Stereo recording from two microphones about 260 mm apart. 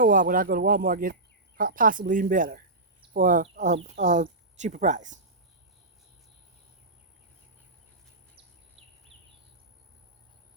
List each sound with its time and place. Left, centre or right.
0.0 s speech: right